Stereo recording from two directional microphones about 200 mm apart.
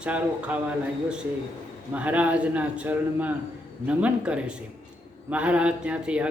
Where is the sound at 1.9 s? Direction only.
5° right (ahead or behind).